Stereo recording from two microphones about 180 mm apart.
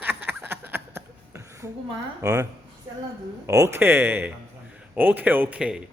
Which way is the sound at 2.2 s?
20° right (ahead or behind).